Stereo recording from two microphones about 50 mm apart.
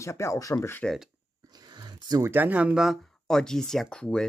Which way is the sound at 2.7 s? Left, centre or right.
Centre.